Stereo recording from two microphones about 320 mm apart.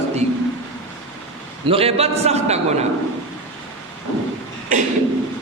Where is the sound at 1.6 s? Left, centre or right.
Centre.